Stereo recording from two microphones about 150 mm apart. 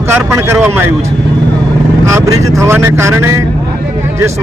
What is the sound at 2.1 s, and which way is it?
Speech, 20° right (ahead or behind).